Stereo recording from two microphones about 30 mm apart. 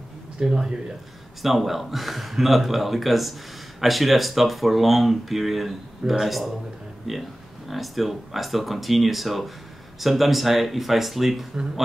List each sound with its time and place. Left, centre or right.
0.4 s speech: right
1.4 s speech: centre